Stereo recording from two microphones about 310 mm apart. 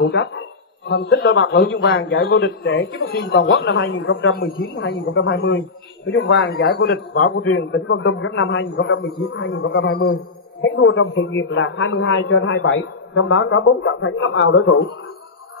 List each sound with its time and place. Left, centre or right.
0.0 s a man's voice: left